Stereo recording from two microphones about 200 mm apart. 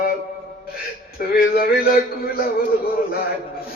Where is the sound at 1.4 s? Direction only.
50° left (ahead or behind).